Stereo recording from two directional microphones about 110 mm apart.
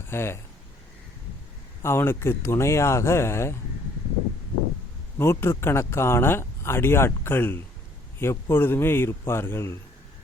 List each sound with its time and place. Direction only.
0.0 s speech: 20° left (ahead or behind)
1.8 s speech: 20° left (ahead or behind)
5.1 s speech: 20° left (ahead or behind)